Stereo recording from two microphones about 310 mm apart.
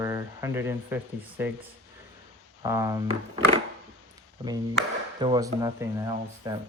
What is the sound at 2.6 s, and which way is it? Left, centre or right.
Speech, centre.